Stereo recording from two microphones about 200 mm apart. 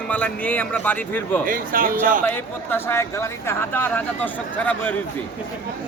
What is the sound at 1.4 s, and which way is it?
Speech, 45° right (ahead or behind).